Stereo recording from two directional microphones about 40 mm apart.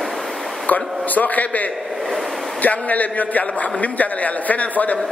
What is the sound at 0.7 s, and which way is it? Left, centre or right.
Speech, left.